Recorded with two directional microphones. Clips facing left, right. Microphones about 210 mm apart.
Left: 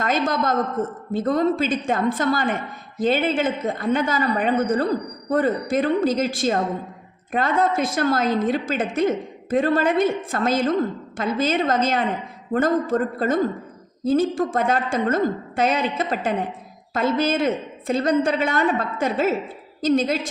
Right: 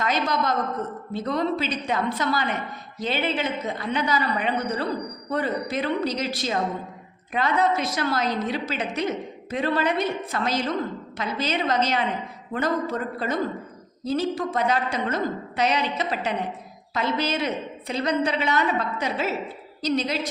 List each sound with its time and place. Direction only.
0.0 s a woman's voice: 50° left (ahead or behind)